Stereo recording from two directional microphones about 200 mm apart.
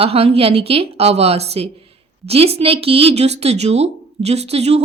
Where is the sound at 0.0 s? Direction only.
30° right (ahead or behind).